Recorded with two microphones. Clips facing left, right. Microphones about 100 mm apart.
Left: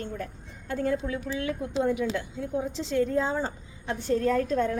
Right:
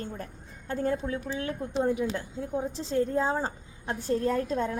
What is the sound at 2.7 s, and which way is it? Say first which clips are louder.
Speech: left 2 dB; 90° left.